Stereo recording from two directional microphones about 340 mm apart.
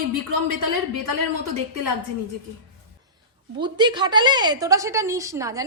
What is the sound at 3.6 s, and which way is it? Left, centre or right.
A woman's voice, centre.